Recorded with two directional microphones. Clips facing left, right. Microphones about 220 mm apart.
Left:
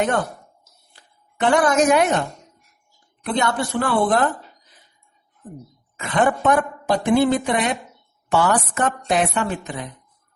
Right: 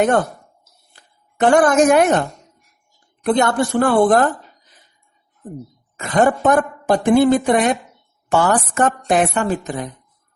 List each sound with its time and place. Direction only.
0.9 s a woman's voice: 45° right (ahead or behind)
3.2 s a woman's voice: 45° right (ahead or behind)
5.4 s a woman's voice: 45° right (ahead or behind)